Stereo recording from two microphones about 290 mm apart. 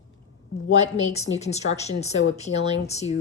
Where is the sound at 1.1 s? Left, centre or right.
Left.